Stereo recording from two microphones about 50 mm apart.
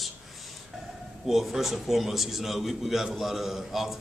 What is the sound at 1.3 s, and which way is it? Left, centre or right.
A man's voice, centre.